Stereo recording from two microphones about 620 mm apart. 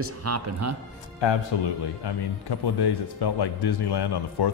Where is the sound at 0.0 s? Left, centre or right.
Right.